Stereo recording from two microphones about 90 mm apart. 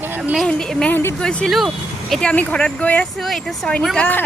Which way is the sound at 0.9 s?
30° left (ahead or behind).